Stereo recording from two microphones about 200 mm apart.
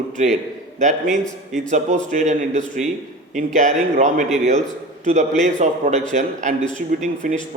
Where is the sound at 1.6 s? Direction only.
35° right (ahead or behind).